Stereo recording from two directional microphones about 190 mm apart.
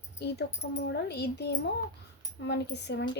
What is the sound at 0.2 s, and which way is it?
A woman's voice, 60° left (ahead or behind).